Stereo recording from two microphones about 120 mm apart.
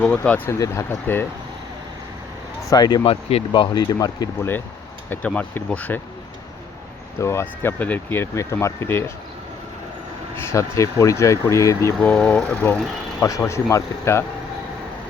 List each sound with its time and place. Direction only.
0.2 s speech: 15° left (ahead or behind)
2.6 s speech: 35° left (ahead or behind)
3.1 s speech: 55° left (ahead or behind)
3.5 s speech: 40° left (ahead or behind)
4.4 s speech: 15° left (ahead or behind)
7.2 s speech: 20° left (ahead or behind)
10.3 s speech: 25° left (ahead or behind)
11.9 s speech: 10° left (ahead or behind)
13.4 s speech: 25° left (ahead or behind)